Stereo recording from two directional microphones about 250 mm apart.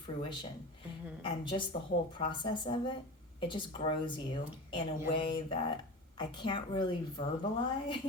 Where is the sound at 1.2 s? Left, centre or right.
Centre.